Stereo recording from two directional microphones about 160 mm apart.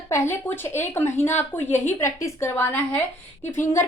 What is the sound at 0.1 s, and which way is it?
A woman's voice, 15° left (ahead or behind).